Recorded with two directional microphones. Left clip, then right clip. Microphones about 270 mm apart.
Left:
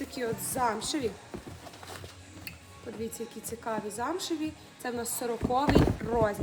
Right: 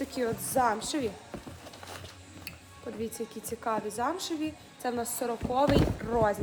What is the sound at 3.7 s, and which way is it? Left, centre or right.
A woman's voice, centre.